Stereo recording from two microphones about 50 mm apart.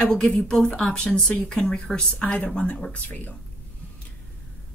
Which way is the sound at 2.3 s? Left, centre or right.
Left.